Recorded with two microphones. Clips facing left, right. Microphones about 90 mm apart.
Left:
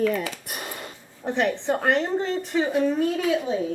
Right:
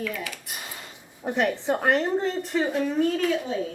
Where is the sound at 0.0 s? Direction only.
40° left (ahead or behind).